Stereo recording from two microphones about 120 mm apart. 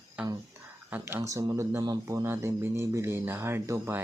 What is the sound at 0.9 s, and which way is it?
Speech, 20° right (ahead or behind).